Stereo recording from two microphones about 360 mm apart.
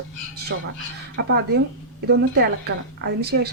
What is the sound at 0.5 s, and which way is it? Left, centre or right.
A woman's voice, right.